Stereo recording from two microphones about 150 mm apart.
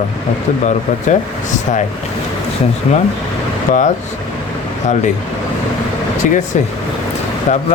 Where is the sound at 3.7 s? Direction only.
55° left (ahead or behind).